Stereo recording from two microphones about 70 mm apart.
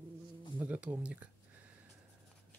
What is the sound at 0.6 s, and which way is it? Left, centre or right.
Speech, right.